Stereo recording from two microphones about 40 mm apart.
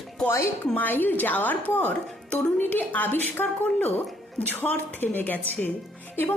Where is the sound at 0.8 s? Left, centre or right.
Left.